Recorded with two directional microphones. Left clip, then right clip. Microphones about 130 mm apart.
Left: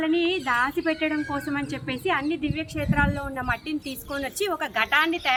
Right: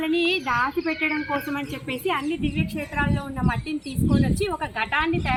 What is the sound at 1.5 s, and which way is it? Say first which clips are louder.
Speech: even; 40° left (ahead or behind).